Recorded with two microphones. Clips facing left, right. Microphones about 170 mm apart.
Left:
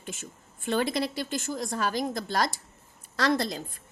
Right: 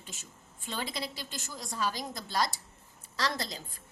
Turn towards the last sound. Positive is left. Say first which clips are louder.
# left 8 dB
turn(degrees=55)  # may be behind; listen again after turning